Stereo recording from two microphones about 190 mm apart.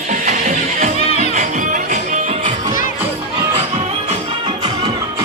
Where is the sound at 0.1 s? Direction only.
40° right (ahead or behind).